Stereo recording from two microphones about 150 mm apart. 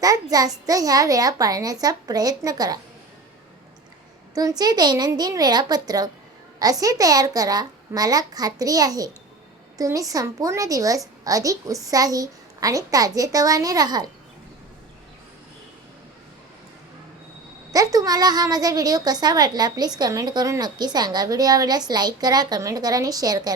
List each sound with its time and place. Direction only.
0.0 s a woman's voice: 25° right (ahead or behind)
4.4 s a woman's voice: 25° right (ahead or behind)
17.7 s a woman's voice: 25° right (ahead or behind)